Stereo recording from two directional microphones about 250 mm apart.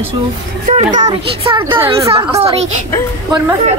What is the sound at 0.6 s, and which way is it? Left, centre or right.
A woman's voice, right.